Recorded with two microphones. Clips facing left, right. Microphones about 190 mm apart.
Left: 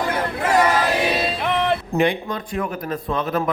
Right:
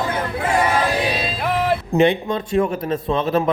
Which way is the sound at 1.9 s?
25° right (ahead or behind).